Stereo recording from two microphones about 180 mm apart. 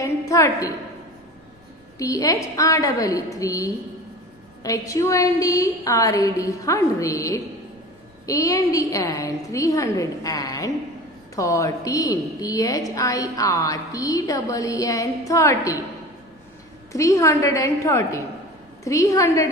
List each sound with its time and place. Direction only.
0.0 s a sound: 15° left (ahead or behind)
2.0 s a woman's voice: 20° left (ahead or behind)
16.9 s a woman's voice: 15° left (ahead or behind)